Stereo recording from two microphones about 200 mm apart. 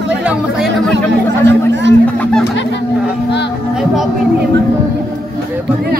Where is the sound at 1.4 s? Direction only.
65° right (ahead or behind).